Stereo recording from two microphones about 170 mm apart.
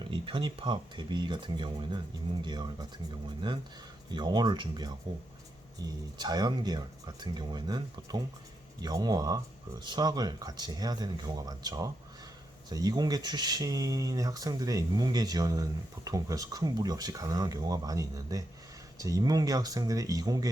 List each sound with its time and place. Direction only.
0.1 s speech: 30° right (ahead or behind)
4.1 s speech: 25° right (ahead or behind)